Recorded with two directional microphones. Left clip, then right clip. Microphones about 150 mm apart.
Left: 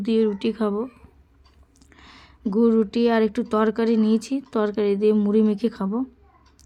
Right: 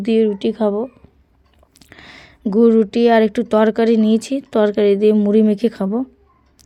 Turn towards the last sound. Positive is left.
turn(degrees=-30)  # may be behind; listen again after turning